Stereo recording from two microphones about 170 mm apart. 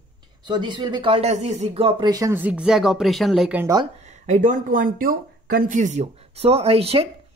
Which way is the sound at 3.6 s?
25° right (ahead or behind).